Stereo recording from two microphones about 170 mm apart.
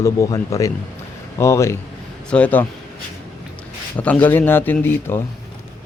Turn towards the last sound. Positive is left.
turn(degrees=15)  # may be behind; listen again after turning